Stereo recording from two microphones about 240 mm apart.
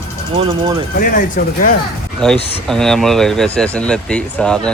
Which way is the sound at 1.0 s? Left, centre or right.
Left.